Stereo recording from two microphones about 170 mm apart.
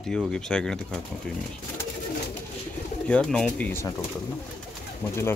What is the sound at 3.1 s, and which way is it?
Speech, 5° left (ahead or behind).